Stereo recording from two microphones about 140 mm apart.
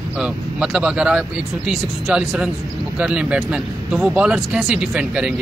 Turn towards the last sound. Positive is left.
turn(degrees=-5)  # may be behind; listen again after turning